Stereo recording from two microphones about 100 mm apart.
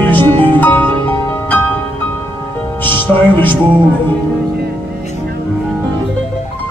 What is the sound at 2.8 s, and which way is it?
Music, 20° left (ahead or behind).